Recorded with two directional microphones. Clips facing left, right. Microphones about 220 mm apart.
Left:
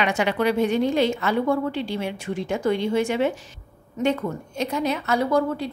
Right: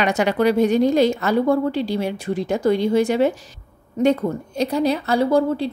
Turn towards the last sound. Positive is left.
turn(degrees=-30)  # may be behind; listen again after turning